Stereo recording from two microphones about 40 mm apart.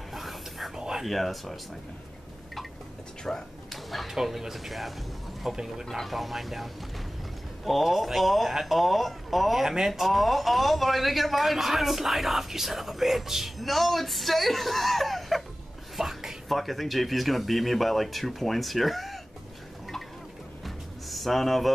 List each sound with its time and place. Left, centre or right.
0.1 s whispering: centre
0.7 s whispering: centre
1.0 s speech: centre
3.3 s speech: left
3.7 s a sound: centre
4.1 s speech: centre
5.9 s speech: centre
16.0 s a sound: centre
16.4 s speech: centre
20.6 s music: centre